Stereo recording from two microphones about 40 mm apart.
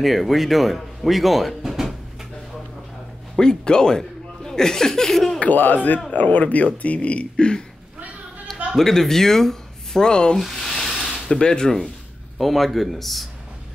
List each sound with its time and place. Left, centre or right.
0.0 s speech: centre
1.6 s a sound: centre
3.3 s speech: left
5.4 s speech: left
8.7 s speech: centre
10.0 s speech: left
10.4 s a sound: centre
11.2 s speech: centre
12.4 s speech: centre